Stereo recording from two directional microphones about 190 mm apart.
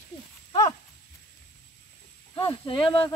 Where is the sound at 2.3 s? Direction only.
25° left (ahead or behind).